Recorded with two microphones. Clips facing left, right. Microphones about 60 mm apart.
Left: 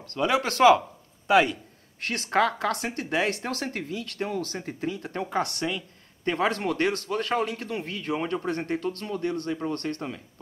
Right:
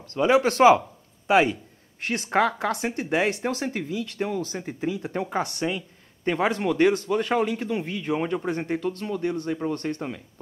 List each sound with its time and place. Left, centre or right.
0.1 s speech: right